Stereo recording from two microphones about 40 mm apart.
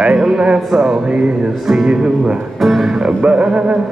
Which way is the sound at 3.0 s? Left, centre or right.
Right.